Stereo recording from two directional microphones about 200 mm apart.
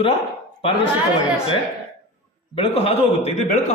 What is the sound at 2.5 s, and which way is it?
A man's voice, 30° left (ahead or behind).